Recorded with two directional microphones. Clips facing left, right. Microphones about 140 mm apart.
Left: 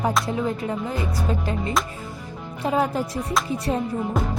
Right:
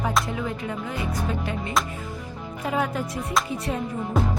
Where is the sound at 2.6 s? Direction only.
30° left (ahead or behind).